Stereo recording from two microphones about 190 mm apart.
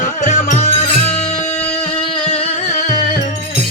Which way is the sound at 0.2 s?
40° left (ahead or behind).